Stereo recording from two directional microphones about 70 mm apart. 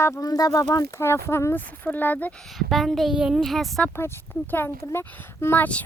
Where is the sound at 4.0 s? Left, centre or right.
Left.